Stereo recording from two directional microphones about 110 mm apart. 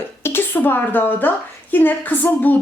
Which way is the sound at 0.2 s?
20° left (ahead or behind).